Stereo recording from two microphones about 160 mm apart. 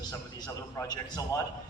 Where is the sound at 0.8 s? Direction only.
20° left (ahead or behind).